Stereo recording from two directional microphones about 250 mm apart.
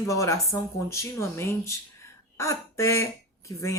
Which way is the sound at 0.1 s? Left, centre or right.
Centre.